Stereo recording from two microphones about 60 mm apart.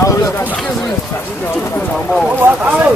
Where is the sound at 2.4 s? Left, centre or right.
Right.